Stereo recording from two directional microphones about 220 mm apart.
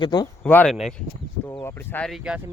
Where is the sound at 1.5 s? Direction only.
10° left (ahead or behind).